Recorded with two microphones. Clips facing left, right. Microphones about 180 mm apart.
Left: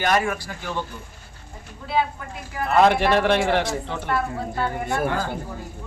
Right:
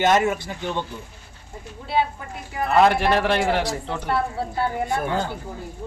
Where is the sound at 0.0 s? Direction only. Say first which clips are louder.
Right 3 dB; 20° right (ahead or behind).